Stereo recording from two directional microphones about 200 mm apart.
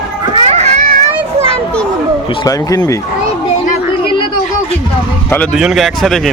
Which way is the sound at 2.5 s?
15° left (ahead or behind).